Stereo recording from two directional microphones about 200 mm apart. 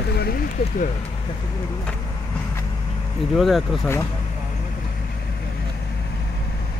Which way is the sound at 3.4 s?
Centre (ahead or behind).